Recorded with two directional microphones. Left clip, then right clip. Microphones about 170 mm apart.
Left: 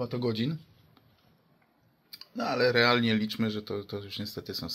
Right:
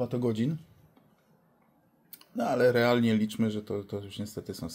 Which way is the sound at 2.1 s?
35° right (ahead or behind).